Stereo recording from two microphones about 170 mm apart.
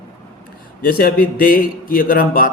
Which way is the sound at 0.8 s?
60° left (ahead or behind).